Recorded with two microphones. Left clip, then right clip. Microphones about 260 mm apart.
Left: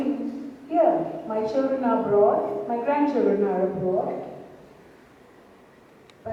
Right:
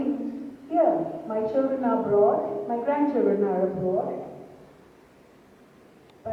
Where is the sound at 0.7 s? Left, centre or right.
Centre.